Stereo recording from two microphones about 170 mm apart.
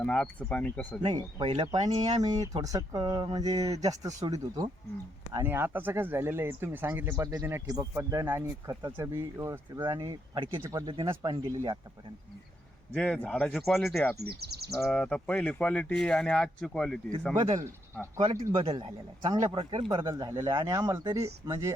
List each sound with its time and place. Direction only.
0.0 s speech: 5° left (ahead or behind)
1.0 s speech: 25° right (ahead or behind)
1.9 s speech: 40° right (ahead or behind)
2.2 s speech: 20° right (ahead or behind)
12.9 s speech: 5° left (ahead or behind)
14.2 s speech: 70° right (ahead or behind)
14.8 s speech: 5° left (ahead or behind)
18.6 s speech: 35° right (ahead or behind)
19.3 s speech: 20° right (ahead or behind)